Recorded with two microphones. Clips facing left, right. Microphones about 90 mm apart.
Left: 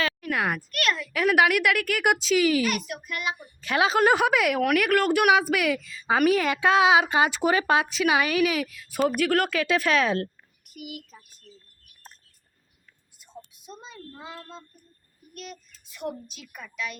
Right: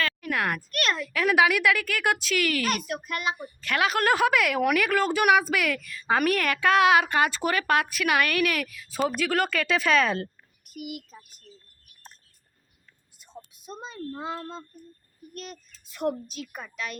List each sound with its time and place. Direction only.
0.2 s a sound: 5° left (ahead or behind)
0.8 s speech: 25° right (ahead or behind)
1.4 s a woman's voice: 10° left (ahead or behind)
2.6 s a child's voice: 35° right (ahead or behind)
3.6 s a woman's voice: 25° left (ahead or behind)
4.6 s a woman's voice: 5° left (ahead or behind)
13.7 s a child's voice: 40° right (ahead or behind)